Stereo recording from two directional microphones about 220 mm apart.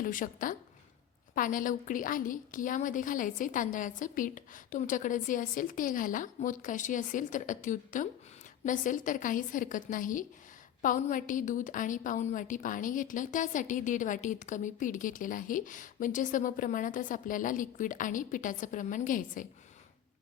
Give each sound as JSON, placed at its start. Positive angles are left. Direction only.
{"t": 0.0, "sound": "a woman's voice", "side_deg": 40}